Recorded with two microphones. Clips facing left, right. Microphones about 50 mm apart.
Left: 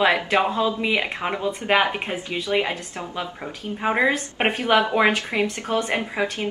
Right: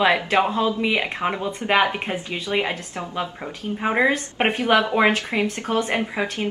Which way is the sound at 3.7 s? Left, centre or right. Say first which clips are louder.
Right 1 dB; centre.